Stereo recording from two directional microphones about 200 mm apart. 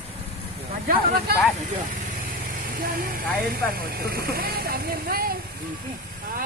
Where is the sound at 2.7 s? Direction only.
45° right (ahead or behind).